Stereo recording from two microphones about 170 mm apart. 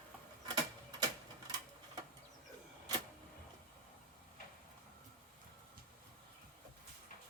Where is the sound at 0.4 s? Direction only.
25° right (ahead or behind).